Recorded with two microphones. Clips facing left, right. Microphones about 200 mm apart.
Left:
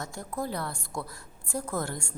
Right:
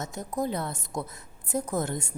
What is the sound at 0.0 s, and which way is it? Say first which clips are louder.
A woman's voice: right 4 dB; 20° right (ahead or behind).